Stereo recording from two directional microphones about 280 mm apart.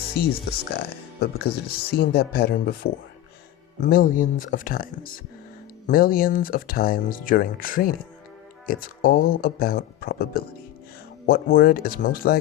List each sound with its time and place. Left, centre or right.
0.2 s speech: left